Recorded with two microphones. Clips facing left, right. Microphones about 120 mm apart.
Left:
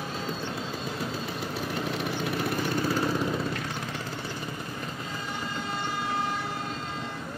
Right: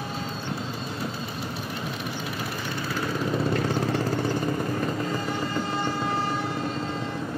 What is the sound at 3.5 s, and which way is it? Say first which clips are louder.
Vehicle: right 9 dB; 35° right (ahead or behind).